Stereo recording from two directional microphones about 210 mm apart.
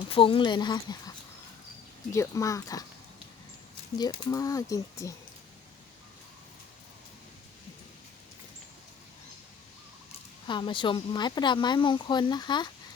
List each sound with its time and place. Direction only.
0.1 s speech: 25° left (ahead or behind)
2.1 s speech: 15° left (ahead or behind)
4.2 s speech: 15° left (ahead or behind)
10.4 s speech: 20° left (ahead or behind)